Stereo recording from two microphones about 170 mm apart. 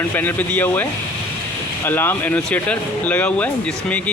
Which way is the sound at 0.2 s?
10° left (ahead or behind).